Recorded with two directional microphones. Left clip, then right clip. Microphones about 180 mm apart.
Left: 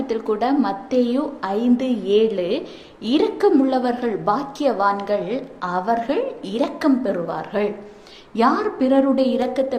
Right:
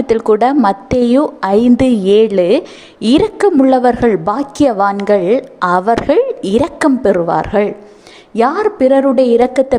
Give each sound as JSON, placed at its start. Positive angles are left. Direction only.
{"t": 0.1, "sound": "a woman's voice", "side_deg": -50}